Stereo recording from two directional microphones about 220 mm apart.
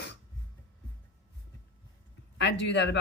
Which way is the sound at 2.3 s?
55° left (ahead or behind).